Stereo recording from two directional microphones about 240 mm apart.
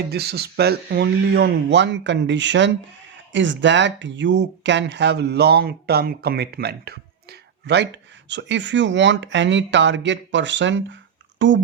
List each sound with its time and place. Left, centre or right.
0.1 s speech: right